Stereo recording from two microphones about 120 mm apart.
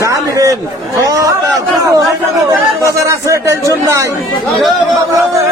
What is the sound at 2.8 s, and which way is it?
Speech, 25° right (ahead or behind).